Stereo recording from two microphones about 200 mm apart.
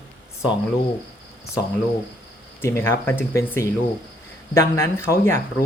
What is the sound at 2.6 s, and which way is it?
Speech, 10° left (ahead or behind).